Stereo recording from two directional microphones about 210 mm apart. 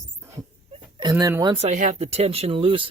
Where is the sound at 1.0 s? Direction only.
20° right (ahead or behind).